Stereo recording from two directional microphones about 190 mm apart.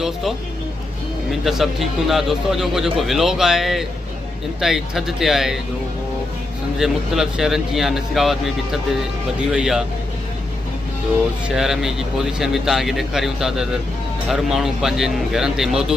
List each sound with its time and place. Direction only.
0.0 s speech: centre (ahead or behind)
6.7 s speech: centre (ahead or behind)
11.4 s speech: centre (ahead or behind)